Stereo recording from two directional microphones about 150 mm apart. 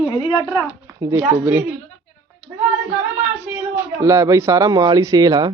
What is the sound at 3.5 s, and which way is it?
A man's voice, 15° right (ahead or behind).